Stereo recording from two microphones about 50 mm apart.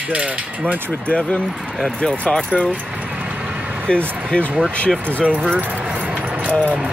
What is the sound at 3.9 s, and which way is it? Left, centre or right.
Speech, left.